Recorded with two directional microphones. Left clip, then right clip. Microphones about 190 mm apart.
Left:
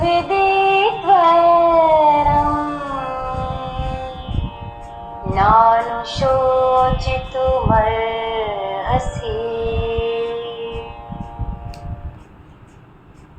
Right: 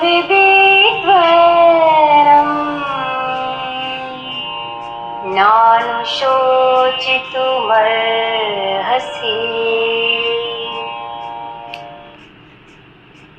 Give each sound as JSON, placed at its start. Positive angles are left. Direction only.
{"t": 0.0, "sound": "music", "side_deg": -20}
{"t": 5.3, "sound": "music", "side_deg": -20}